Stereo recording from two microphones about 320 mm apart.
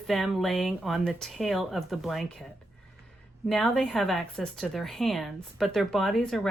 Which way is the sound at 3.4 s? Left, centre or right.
Centre.